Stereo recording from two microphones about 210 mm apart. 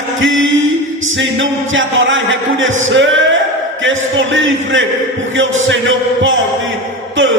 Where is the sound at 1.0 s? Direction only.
60° right (ahead or behind).